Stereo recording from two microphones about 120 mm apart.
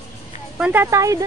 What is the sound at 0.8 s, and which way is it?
Speech, 25° right (ahead or behind).